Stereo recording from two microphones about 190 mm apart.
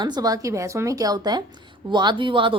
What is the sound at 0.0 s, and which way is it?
Speech, 20° right (ahead or behind).